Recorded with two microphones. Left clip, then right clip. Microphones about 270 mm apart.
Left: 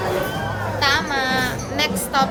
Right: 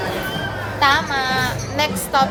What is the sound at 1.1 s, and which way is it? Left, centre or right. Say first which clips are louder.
Speech: right 1 dB; centre.